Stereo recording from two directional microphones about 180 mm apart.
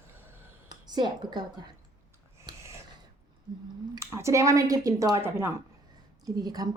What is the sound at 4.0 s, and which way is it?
Speech, 15° right (ahead or behind).